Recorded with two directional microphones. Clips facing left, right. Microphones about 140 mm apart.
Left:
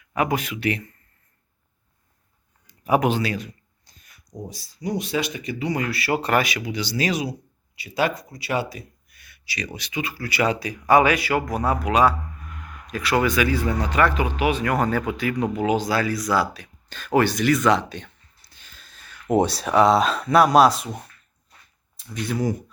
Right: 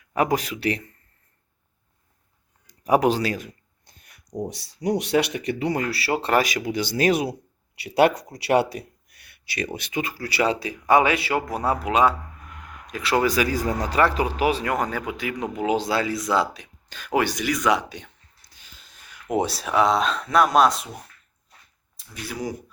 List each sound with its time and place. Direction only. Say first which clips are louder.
0.1 s speech: right 1 dB; 35° right (ahead or behind)
2.6 s a sound: right 1 dB; 40° right (ahead or behind); by 4.1 s 60° right (ahead or behind)
4.4 s speech: right 4 dB; 70° right (ahead or behind)
5.7 s speech: left 1 dB; 35° right (ahead or behind)
6.7 s speech: right 4 dB; 50° right (ahead or behind); by 8.3 s 70° right (ahead or behind)
8.4 s a sound: right 7 dB; 70° right (ahead or behind)
9.7 s speech: right 1 dB; 50° right (ahead or behind)
14.6 s speech: left 3 dB; 20° right (ahead or behind)
16.9 s speech: left 3 dB; 10° right (ahead or behind)
21.9 s speech: left 7 dB; 10° right (ahead or behind)